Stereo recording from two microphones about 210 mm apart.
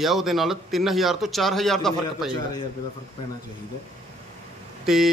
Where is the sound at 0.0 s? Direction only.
Centre (ahead or behind).